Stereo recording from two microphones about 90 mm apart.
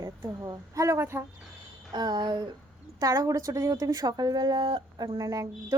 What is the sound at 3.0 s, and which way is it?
Speech, 40° right (ahead or behind).